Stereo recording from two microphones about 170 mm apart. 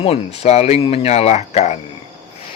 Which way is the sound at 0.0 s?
35° left (ahead or behind).